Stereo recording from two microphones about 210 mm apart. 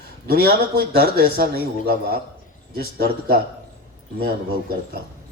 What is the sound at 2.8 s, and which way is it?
Speech, 45° right (ahead or behind).